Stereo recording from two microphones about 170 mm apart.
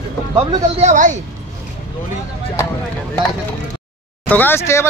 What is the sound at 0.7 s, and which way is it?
Speech, 45° right (ahead or behind).